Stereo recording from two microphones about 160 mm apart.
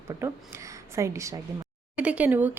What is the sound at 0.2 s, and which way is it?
A woman's voice, 15° right (ahead or behind).